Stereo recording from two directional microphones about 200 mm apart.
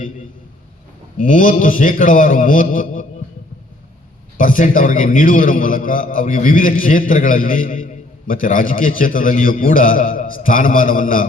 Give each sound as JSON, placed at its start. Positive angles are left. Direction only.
{"t": 1.2, "sound": "a man's voice", "side_deg": 40}
{"t": 4.4, "sound": "a man's voice", "side_deg": 45}